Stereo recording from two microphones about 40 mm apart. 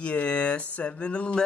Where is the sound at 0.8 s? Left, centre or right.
Left.